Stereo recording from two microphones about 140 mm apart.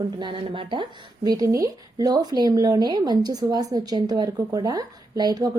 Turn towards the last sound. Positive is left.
turn(degrees=-30)  # may be behind; listen again after turning